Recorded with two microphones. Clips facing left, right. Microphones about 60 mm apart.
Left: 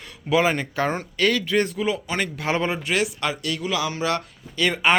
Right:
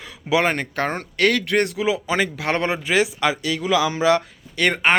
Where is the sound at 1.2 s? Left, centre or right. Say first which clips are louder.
Right 3 dB; right.